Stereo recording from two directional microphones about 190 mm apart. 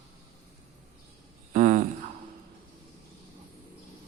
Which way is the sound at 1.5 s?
45° right (ahead or behind).